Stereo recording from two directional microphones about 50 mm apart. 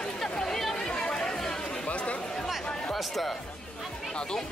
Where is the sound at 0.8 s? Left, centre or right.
Centre.